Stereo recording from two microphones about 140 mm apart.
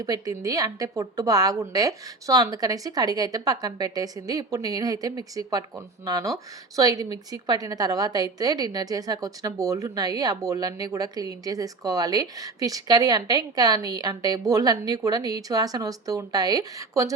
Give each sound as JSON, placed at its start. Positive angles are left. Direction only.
{"t": 0.0, "sound": "a woman's voice", "side_deg": -25}